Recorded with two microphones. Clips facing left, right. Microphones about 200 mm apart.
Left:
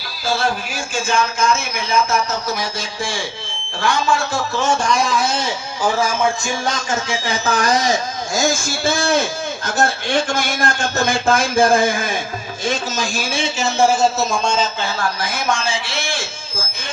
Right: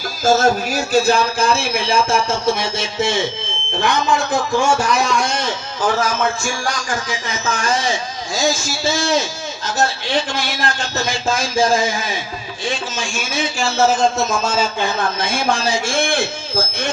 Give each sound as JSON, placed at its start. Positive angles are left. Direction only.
{"t": 0.3, "sound": "a man's voice", "side_deg": -45}
{"t": 8.4, "sound": "a man's voice", "side_deg": 50}
{"t": 12.6, "sound": "a man's voice", "side_deg": 40}